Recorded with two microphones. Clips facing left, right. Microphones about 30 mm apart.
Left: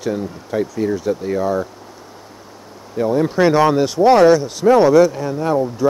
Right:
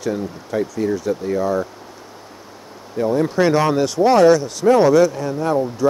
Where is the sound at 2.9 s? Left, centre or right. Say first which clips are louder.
Left 1 dB; centre.